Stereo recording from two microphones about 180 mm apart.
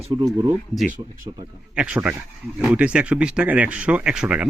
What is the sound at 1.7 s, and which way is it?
Speech, 5° right (ahead or behind).